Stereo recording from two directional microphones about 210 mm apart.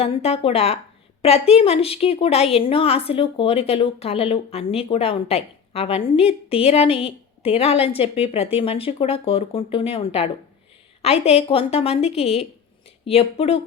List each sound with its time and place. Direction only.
0.0 s a woman's voice: 30° left (ahead or behind)